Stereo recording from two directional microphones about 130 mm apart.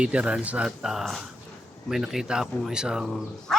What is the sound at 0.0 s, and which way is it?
A man's voice, 10° right (ahead or behind).